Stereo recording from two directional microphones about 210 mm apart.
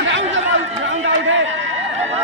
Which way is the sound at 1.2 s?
65° right (ahead or behind).